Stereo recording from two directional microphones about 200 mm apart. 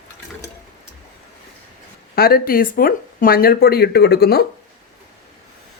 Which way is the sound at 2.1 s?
50° left (ahead or behind).